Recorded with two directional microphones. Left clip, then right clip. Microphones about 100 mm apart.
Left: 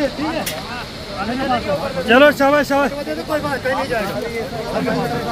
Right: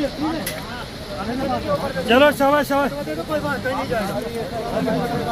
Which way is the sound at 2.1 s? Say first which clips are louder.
Left 3 dB; 40° left (ahead or behind).